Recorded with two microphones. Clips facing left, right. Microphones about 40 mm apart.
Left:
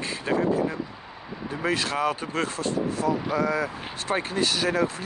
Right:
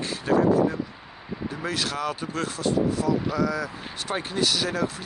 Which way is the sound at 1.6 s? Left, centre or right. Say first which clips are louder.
Left 4 dB; left.